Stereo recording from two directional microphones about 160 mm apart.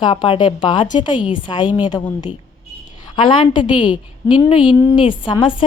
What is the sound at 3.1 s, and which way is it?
Speech, 30° left (ahead or behind).